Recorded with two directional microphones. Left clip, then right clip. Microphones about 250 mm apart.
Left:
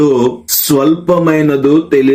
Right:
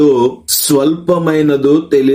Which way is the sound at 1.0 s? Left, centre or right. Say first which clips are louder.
Left 1 dB; centre.